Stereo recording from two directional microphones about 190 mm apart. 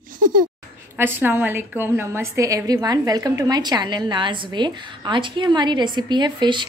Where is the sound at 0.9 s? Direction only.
10° right (ahead or behind).